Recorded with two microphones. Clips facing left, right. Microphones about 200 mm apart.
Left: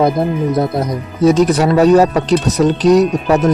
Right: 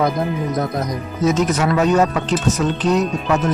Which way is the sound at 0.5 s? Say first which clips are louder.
Left 5 dB; 30° left (ahead or behind).